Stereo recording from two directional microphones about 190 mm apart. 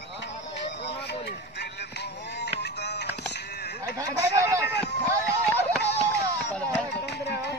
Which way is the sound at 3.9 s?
15° right (ahead or behind).